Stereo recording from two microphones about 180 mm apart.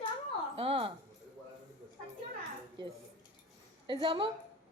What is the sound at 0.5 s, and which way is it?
Speech, 30° right (ahead or behind).